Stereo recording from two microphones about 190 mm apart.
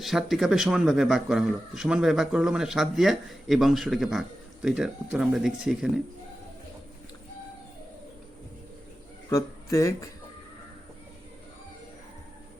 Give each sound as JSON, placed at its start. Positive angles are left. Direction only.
{"t": 0.0, "sound": "a man's voice", "side_deg": 0}
{"t": 9.3, "sound": "speech", "side_deg": 15}